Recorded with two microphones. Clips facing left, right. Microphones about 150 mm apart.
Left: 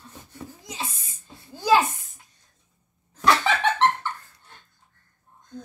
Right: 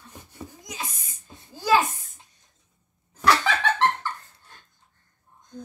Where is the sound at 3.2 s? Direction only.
25° left (ahead or behind).